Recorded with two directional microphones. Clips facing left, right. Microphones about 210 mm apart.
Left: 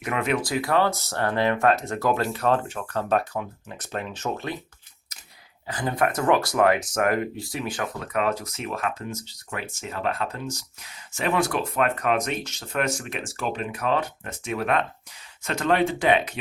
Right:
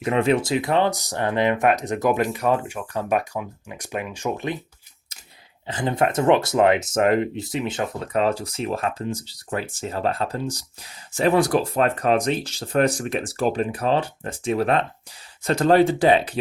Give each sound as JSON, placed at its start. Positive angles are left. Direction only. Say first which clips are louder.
{"t": 0.0, "sound": "speech", "louder": "right 6 dB", "side_deg": -30}
{"t": 5.6, "sound": "speech", "louder": "right 3 dB", "side_deg": -25}